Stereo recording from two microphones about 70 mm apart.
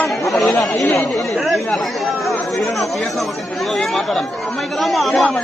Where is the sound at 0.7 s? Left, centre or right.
Left.